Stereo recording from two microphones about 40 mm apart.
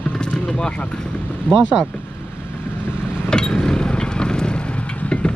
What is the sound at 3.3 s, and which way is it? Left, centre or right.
Vehicle, centre.